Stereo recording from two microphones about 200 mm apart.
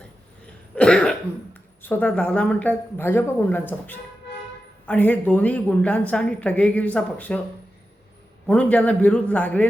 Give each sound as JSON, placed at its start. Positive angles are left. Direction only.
{"t": 0.8, "sound": "cough", "side_deg": 5}
{"t": 1.8, "sound": "a woman's voice", "side_deg": 10}
{"t": 8.4, "sound": "a woman's voice", "side_deg": 5}